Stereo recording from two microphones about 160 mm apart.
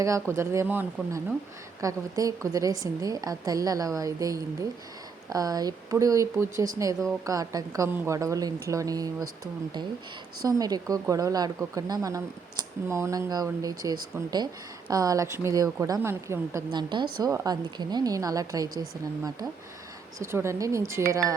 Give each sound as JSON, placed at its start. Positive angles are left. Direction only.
{"t": 0.0, "sound": "a woman's voice", "side_deg": -20}